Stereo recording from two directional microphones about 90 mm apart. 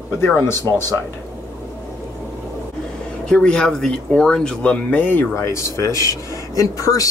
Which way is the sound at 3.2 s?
10° left (ahead or behind).